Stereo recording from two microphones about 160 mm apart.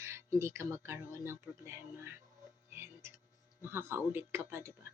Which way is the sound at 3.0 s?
15° right (ahead or behind).